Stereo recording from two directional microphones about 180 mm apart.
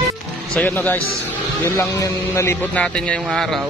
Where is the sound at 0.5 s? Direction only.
10° left (ahead or behind).